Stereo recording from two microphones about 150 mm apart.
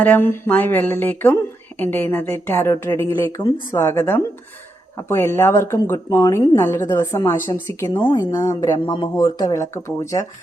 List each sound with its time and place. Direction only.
0.0 s a woman's voice: 15° left (ahead or behind)
6.6 s a woman's voice: 15° left (ahead or behind)